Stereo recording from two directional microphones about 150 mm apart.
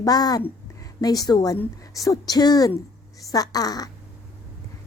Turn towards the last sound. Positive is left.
turn(degrees=25)  # may be behind; listen again after turning